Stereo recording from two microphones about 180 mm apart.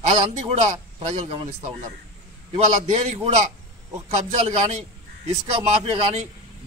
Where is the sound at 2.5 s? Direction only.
40° right (ahead or behind).